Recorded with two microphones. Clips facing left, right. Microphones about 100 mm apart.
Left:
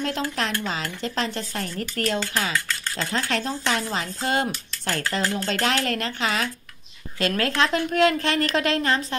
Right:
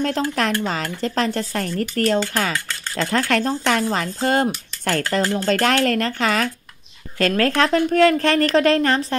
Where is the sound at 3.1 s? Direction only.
55° right (ahead or behind).